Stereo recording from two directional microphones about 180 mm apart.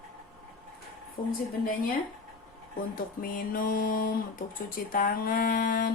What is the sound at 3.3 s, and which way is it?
Speech, 50° left (ahead or behind).